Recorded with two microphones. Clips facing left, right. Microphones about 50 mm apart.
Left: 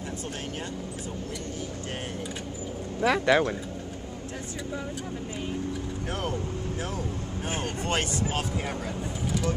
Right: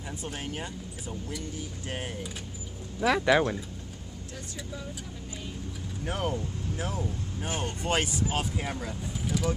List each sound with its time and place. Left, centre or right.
3.0 s speech: centre
6.0 s speech: centre
7.4 s speech: left
7.8 s speech: centre